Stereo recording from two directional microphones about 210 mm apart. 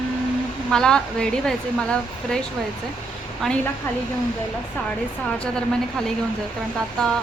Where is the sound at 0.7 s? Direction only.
5° left (ahead or behind).